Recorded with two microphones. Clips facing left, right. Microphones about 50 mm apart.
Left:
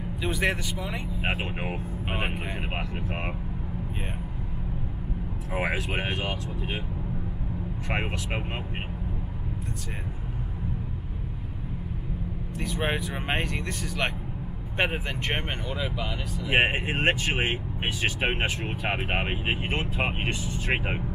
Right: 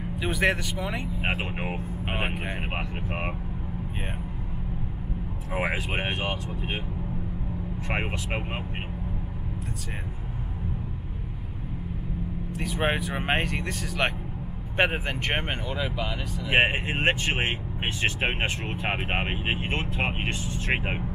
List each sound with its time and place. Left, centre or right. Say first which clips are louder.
0.2 s speech: right 2 dB; centre
5.6 s speech: even; centre
7.9 s speech: even; centre
12.5 s speech: right 2 dB; centre
13.4 s speech: right 1 dB; centre
18.4 s speech: even; centre
18.8 s speech: even; centre
19.7 s speech: even; centre